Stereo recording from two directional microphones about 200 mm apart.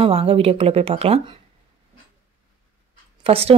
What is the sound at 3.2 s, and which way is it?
Speech, 30° right (ahead or behind).